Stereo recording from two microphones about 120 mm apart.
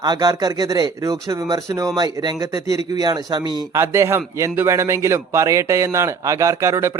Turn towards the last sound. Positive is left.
turn(degrees=-25)  # may be behind; listen again after turning